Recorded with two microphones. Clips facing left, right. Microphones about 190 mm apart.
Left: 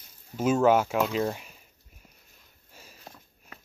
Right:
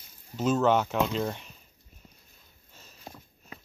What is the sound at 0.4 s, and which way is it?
Speech, 10° left (ahead or behind).